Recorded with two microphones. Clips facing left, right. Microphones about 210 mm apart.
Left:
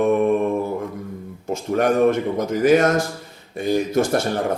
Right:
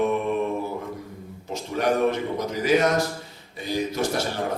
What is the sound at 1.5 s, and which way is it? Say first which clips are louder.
A man's voice: left 5 dB; 50° left (ahead or behind).